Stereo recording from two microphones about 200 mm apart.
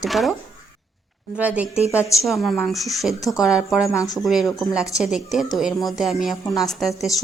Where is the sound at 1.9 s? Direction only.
15° left (ahead or behind).